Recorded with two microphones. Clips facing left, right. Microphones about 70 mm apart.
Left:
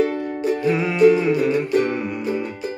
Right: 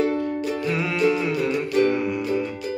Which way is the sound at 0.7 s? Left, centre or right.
Centre.